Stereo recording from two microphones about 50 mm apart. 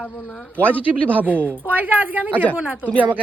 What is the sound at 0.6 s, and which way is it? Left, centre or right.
Speech, right.